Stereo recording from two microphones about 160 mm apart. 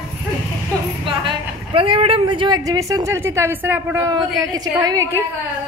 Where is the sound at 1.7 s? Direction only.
35° right (ahead or behind); by 4.1 s 10° right (ahead or behind).